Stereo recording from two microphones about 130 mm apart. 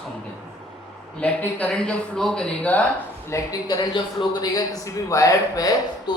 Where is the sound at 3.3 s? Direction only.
30° left (ahead or behind).